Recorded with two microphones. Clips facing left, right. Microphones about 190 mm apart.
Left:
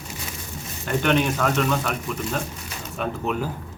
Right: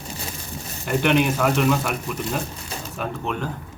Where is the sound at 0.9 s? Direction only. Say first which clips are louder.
Right 2 dB; 10° right (ahead or behind).